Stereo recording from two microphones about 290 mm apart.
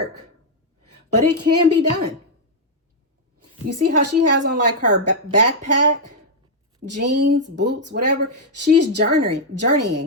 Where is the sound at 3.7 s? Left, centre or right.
Right.